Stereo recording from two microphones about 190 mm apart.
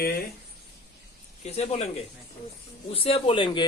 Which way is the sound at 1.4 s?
35° left (ahead or behind).